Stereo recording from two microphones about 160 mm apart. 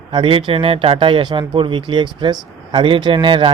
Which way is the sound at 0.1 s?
35° right (ahead or behind).